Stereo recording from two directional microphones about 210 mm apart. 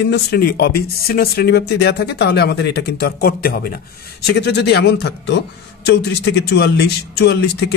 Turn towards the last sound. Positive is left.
turn(degrees=55)  # may be behind; listen again after turning